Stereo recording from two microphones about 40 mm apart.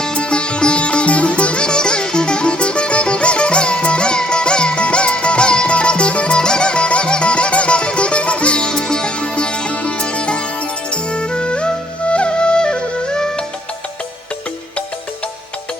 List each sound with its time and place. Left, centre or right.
0.0 s sitar: left
6.4 s music: left